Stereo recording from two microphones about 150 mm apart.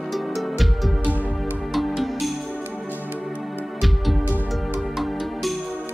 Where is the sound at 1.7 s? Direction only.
Centre (ahead or behind).